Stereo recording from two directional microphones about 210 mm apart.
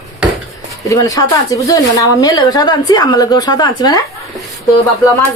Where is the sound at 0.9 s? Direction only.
15° left (ahead or behind).